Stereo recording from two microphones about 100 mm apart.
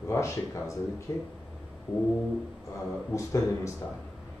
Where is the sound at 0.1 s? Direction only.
30° left (ahead or behind).